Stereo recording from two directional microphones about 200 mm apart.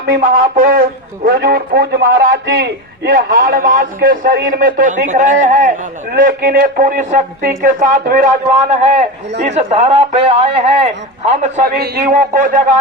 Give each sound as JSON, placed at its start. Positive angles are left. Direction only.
{"t": 0.0, "sound": "speech", "side_deg": -45}